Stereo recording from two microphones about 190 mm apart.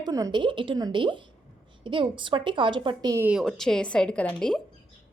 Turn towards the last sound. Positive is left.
turn(degrees=5)  # may be behind; listen again after turning